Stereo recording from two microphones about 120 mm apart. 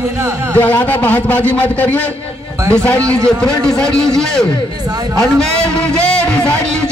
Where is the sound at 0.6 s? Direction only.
15° left (ahead or behind).